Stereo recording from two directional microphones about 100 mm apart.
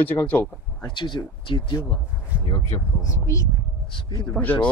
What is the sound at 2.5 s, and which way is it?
Speech, 30° left (ahead or behind).